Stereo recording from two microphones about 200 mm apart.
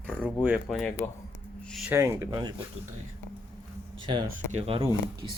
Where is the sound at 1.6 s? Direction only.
Centre (ahead or behind).